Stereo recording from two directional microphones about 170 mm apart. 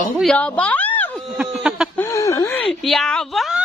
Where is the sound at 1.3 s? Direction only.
5° right (ahead or behind).